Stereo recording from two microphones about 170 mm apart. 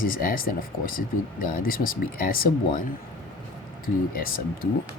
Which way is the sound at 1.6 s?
55° left (ahead or behind).